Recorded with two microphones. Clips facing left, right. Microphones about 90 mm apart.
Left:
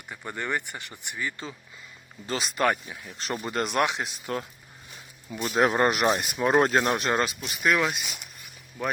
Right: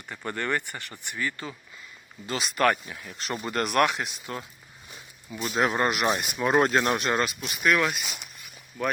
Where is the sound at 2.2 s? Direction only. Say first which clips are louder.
Right 1 dB; 35° left (ahead or behind).